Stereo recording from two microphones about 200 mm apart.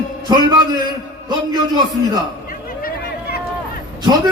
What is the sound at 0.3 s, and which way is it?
Speech, 20° right (ahead or behind).